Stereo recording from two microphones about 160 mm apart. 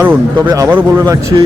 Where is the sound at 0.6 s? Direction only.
20° right (ahead or behind).